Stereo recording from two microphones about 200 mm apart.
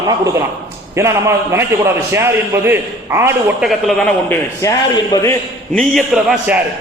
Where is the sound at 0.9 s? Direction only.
15° right (ahead or behind).